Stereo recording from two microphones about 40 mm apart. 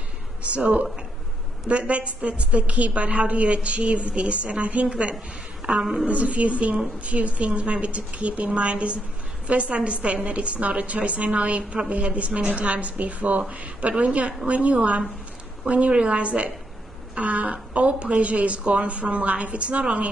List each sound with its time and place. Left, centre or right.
0.4 s a woman's voice: right